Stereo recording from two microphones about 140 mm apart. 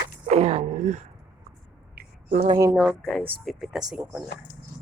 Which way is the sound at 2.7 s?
Centre (ahead or behind).